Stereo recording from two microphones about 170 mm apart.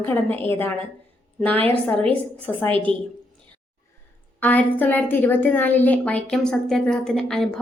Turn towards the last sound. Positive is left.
turn(degrees=0)  # may be behind; listen again after turning